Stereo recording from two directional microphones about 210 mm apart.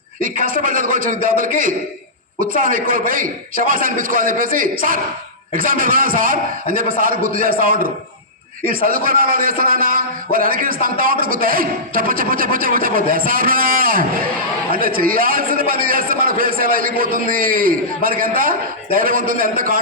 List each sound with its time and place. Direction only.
0.2 s a man's voice: 40° right (ahead or behind)